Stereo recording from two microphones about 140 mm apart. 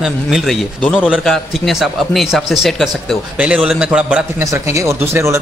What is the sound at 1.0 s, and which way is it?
Speech, centre (ahead or behind).